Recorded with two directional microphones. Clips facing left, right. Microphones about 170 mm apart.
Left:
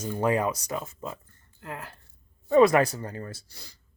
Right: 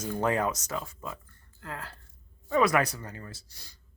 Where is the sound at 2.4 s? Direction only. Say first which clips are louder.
Left 6 dB; 30° left (ahead or behind).